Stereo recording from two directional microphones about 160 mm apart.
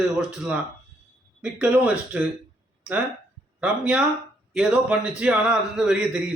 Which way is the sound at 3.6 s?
5° right (ahead or behind).